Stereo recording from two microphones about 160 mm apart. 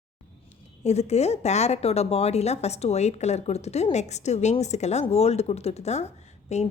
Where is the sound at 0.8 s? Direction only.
40° left (ahead or behind).